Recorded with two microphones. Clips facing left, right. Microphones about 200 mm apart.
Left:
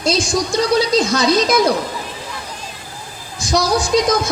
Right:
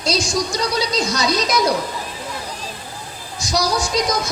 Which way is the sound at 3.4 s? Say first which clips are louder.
Left 3 dB; 50° left (ahead or behind).